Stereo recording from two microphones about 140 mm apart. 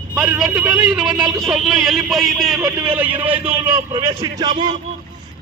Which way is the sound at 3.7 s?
30° right (ahead or behind).